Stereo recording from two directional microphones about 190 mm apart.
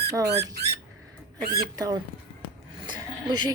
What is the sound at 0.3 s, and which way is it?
Speech, 60° right (ahead or behind).